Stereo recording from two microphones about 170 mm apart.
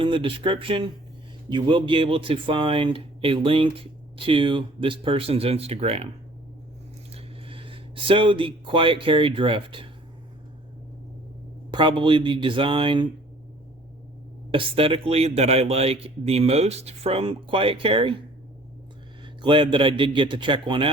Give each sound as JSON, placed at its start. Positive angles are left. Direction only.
{"t": 0.0, "sound": "speech", "side_deg": -30}
{"t": 7.1, "sound": "speech", "side_deg": -35}
{"t": 11.7, "sound": "a man's voice", "side_deg": -30}
{"t": 14.5, "sound": "speech", "side_deg": -35}
{"t": 19.4, "sound": "a man's voice", "side_deg": -30}